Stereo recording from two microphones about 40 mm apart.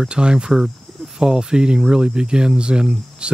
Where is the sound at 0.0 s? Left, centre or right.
Right.